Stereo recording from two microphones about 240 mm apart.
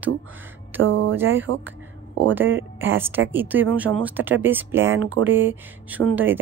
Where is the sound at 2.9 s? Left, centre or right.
Centre.